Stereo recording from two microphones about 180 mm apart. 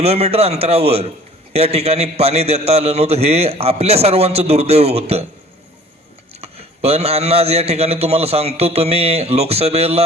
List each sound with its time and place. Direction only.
0.0 s a man's voice: 35° right (ahead or behind)
6.4 s a man's voice: 35° right (ahead or behind)